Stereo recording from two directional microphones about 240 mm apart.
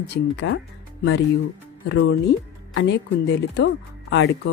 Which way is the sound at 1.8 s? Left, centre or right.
Left.